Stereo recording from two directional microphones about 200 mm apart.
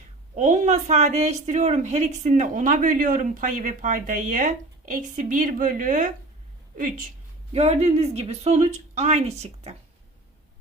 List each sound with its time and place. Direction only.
0.3 s a woman's voice: 40° right (ahead or behind)
7.5 s a woman's voice: 30° right (ahead or behind)